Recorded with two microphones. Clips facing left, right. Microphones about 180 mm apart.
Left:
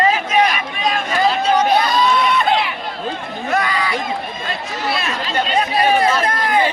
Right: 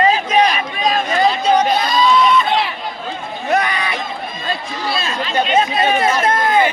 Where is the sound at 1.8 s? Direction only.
60° left (ahead or behind).